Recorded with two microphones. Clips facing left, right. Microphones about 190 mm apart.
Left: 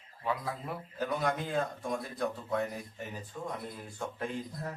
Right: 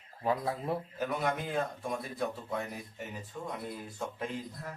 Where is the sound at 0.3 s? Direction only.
30° right (ahead or behind).